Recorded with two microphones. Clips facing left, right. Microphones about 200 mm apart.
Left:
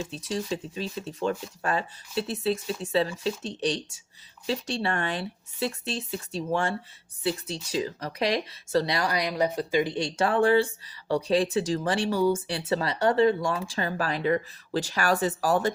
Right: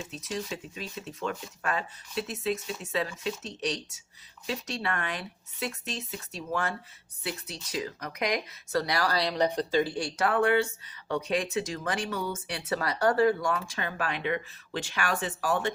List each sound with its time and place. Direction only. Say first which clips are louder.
0.1 s speech: left 4 dB; 30° left (ahead or behind); by 9.8 s 10° left (ahead or behind)
9.8 s speech: left 3 dB; 20° left (ahead or behind); by 15.7 s 40° left (ahead or behind)